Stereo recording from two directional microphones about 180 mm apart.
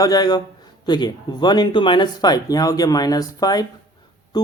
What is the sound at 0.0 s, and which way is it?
A man's voice, 20° left (ahead or behind).